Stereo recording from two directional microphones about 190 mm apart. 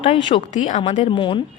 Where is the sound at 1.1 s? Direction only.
25° left (ahead or behind).